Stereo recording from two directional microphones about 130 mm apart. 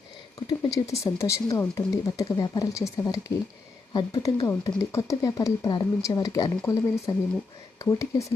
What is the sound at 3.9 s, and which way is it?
Speech, 35° left (ahead or behind).